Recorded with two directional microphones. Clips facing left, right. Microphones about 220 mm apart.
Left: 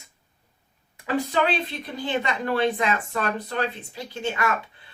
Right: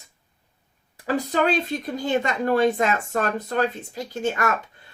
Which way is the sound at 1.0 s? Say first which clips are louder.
Right 2 dB; 40° right (ahead or behind).